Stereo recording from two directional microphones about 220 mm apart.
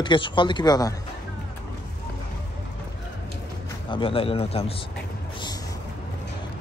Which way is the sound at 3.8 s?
25° left (ahead or behind).